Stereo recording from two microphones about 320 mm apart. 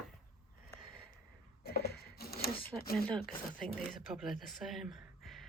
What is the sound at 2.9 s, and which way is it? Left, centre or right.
Speech, centre.